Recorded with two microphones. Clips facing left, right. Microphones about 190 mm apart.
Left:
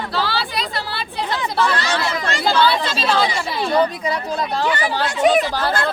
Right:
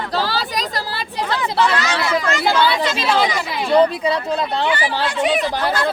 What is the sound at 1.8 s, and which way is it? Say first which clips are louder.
Speech: right 2 dB; 35° left (ahead or behind).